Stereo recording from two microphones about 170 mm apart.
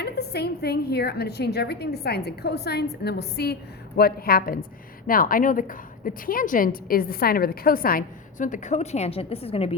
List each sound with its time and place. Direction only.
0.0 s a woman's voice: 70° left (ahead or behind); by 9.7 s 35° left (ahead or behind)